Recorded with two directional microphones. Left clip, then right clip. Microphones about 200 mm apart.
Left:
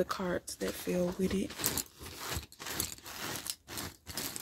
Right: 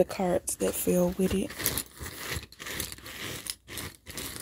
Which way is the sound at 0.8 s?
40° right (ahead or behind).